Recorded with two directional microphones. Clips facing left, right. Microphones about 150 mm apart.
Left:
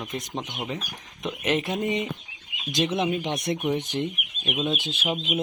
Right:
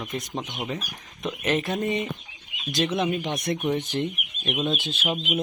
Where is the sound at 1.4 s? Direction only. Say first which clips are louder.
Even; 20° left (ahead or behind).